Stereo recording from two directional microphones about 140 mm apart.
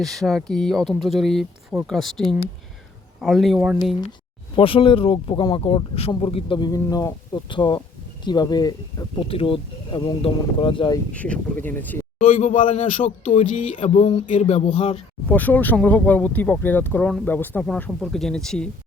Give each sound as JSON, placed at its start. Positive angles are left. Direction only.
{"t": 0.0, "sound": "speech", "side_deg": 0}
{"t": 4.5, "sound": "speech", "side_deg": 40}
{"t": 9.2, "sound": "speech", "side_deg": 40}
{"t": 11.1, "sound": "speech", "side_deg": 10}
{"t": 12.2, "sound": "a man's voice", "side_deg": 50}
{"t": 13.8, "sound": "speech", "side_deg": 45}
{"t": 14.3, "sound": "speech", "side_deg": 60}
{"t": 15.3, "sound": "speech", "side_deg": 10}